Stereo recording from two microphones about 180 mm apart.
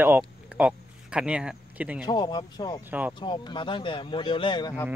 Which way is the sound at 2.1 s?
25° left (ahead or behind).